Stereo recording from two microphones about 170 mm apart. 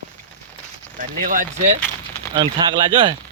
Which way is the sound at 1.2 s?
50° right (ahead or behind).